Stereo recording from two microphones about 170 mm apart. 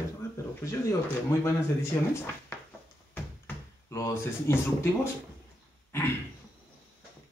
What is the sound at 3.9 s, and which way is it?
Speech, 15° left (ahead or behind).